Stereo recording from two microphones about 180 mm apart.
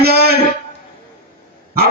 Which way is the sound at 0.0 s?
60° right (ahead or behind).